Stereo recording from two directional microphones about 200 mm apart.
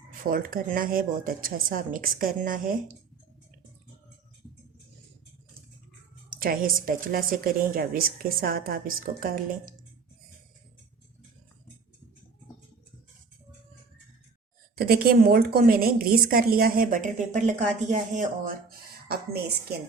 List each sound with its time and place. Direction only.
0.2 s a woman's voice: 45° right (ahead or behind)
6.4 s a woman's voice: 45° right (ahead or behind)
14.8 s a woman's voice: 50° right (ahead or behind)
19.0 s a woman's voice: 50° right (ahead or behind)